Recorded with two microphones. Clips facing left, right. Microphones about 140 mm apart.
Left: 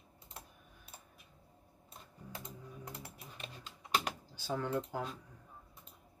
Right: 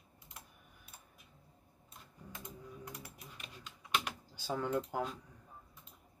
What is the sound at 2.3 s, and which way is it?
Typing, 25° left (ahead or behind).